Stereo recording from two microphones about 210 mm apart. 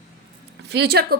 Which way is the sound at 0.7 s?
50° right (ahead or behind).